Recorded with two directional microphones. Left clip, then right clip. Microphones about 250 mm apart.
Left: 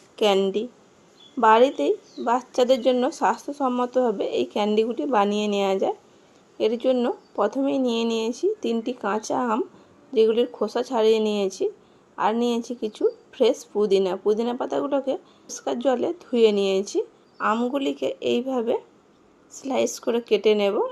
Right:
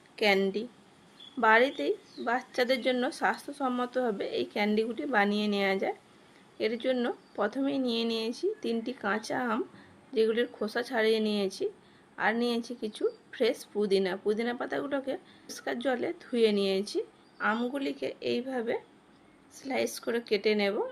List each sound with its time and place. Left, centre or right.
0.2 s speech: centre
0.4 s speech: centre
17.7 s speech: centre
18.2 s speech: centre